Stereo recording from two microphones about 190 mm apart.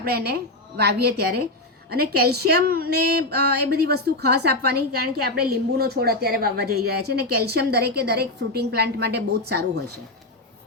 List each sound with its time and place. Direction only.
0.0 s a woman's voice: 55° right (ahead or behind)